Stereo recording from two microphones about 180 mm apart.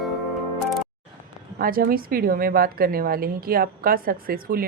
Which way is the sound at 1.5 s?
55° right (ahead or behind).